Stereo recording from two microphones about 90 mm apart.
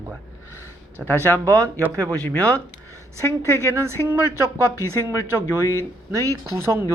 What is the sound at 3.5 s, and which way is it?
A woman's voice, 30° right (ahead or behind).